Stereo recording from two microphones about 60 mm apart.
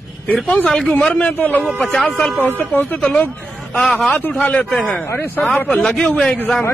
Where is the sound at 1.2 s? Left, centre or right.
Left.